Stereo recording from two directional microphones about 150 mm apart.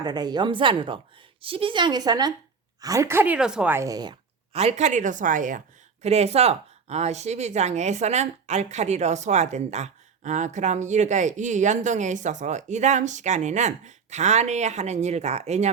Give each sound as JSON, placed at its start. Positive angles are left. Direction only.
{"t": 0.0, "sound": "a woman's voice", "side_deg": -25}
{"t": 3.8, "sound": "a woman's voice", "side_deg": -25}
{"t": 4.5, "sound": "a woman's voice", "side_deg": -50}